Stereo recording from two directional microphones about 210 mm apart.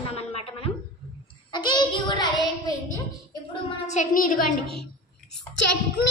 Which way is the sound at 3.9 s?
40° left (ahead or behind).